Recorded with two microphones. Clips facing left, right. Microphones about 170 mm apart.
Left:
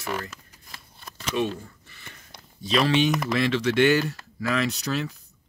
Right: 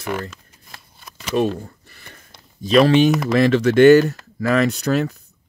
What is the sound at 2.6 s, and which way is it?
Speech, 45° right (ahead or behind).